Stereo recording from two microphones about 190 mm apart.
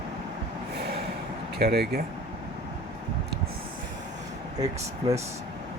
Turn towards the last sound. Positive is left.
turn(degrees=-20)  # may be behind; listen again after turning